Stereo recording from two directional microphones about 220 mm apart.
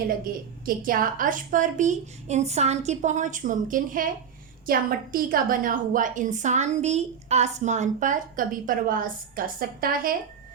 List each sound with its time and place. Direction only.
0.6 s a woman's voice: 40° right (ahead or behind)